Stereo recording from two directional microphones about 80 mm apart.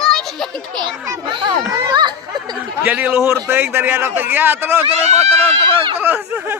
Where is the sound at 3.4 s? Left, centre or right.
Right.